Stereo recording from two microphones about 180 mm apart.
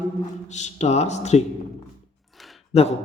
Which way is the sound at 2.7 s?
35° left (ahead or behind).